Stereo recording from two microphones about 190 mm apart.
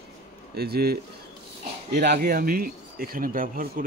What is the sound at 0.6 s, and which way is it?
A man's voice, 55° right (ahead or behind).